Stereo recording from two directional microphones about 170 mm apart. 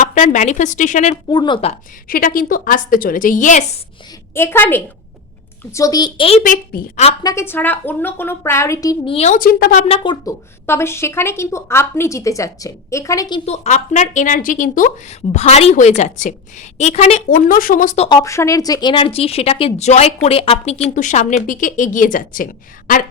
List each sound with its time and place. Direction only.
0.0 s speech: 45° left (ahead or behind)
1.3 s a child's voice: 25° left (ahead or behind)
2.0 s speech: 55° left (ahead or behind)
4.4 s a child's voice: 15° left (ahead or behind); by 6.4 s 35° left (ahead or behind)
6.4 s speech: 50° left (ahead or behind)
7.2 s speech: 20° left (ahead or behind)
9.0 s speech: 35° left (ahead or behind)
9.3 s a woman's voice: 55° left (ahead or behind)
9.8 s a child's voice: 30° left (ahead or behind)
10.7 s speech: 15° left (ahead or behind)
13.4 s speech: 40° left (ahead or behind)
15.3 s speech: 40° left (ahead or behind)
18.1 s speech: 20° left (ahead or behind); by 22.4 s 50° left (ahead or behind)